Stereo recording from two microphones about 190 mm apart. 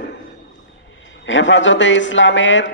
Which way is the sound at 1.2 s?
75° left (ahead or behind).